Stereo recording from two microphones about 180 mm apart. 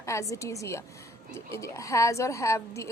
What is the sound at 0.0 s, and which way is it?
A woman's voice, 15° left (ahead or behind).